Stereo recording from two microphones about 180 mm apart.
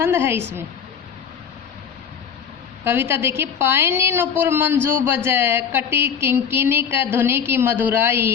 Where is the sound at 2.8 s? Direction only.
15° right (ahead or behind).